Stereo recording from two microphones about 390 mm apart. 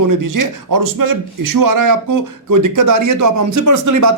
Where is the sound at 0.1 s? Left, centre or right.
Right.